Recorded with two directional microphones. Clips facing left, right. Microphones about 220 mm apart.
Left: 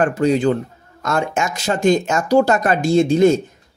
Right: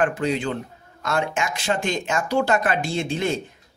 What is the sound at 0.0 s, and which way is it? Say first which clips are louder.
Speech: left 7 dB; 40° left (ahead or behind).